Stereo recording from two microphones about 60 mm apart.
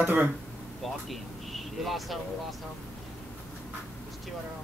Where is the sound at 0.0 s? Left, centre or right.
Right.